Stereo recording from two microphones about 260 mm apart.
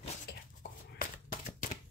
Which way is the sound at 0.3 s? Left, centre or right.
Left.